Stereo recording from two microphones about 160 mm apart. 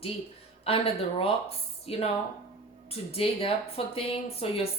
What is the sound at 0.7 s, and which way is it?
Speech, 35° left (ahead or behind).